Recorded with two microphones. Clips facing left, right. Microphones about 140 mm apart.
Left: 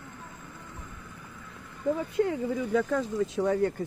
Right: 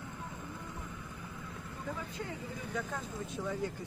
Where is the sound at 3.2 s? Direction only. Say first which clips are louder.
Left 10 dB; 90° left.